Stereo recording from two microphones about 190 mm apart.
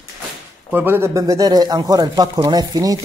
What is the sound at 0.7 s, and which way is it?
Speech, 10° right (ahead or behind).